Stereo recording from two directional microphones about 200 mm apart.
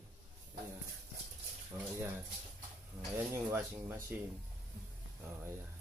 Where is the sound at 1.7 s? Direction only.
15° right (ahead or behind).